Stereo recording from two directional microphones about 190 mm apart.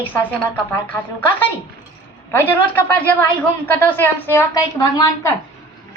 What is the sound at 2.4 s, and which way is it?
A woman's voice, 10° left (ahead or behind).